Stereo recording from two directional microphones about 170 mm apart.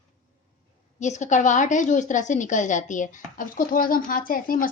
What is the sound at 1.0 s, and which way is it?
A woman's voice, 45° left (ahead or behind).